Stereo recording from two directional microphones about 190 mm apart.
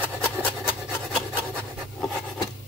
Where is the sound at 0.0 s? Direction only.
10° left (ahead or behind).